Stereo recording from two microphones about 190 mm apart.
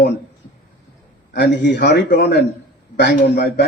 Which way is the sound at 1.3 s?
60° left (ahead or behind).